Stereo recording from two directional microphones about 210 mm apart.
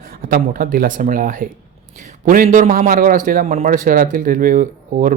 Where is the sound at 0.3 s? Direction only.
45° right (ahead or behind).